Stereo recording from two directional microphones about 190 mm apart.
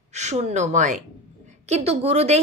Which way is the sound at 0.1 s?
40° right (ahead or behind).